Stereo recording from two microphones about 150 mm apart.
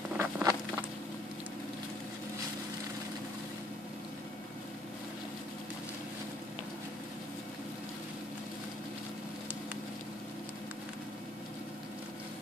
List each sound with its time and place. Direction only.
0.2 s insect: 20° right (ahead or behind)